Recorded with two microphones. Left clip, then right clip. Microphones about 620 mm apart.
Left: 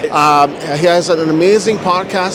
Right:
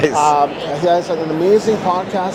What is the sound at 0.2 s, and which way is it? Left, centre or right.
Speech, left.